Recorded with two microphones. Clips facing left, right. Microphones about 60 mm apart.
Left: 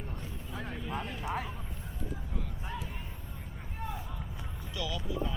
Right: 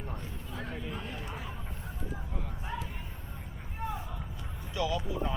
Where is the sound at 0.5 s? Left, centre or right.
Centre.